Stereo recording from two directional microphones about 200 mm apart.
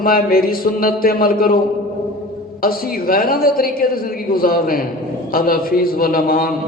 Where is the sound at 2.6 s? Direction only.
45° left (ahead or behind).